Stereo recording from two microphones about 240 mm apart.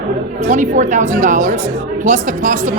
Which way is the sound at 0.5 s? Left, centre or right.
Right.